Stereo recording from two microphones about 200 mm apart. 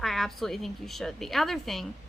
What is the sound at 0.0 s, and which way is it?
A woman's voice, centre (ahead or behind).